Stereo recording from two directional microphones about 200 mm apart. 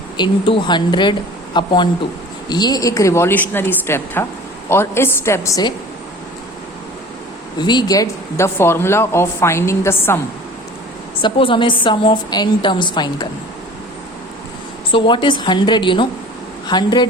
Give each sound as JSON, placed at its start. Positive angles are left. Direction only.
{"t": 0.2, "sound": "a woman's voice", "side_deg": 25}
{"t": 7.6, "sound": "speech", "side_deg": 20}
{"t": 11.2, "sound": "a woman's voice", "side_deg": 25}
{"t": 14.9, "sound": "a woman's voice", "side_deg": 25}